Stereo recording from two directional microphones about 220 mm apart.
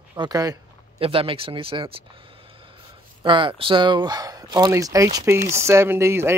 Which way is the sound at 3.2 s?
20° right (ahead or behind).